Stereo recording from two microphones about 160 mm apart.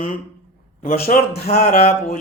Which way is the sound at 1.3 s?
45° left (ahead or behind).